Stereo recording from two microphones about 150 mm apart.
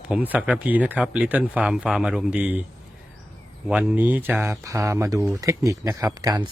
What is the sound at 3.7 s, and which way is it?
Speech, 10° right (ahead or behind).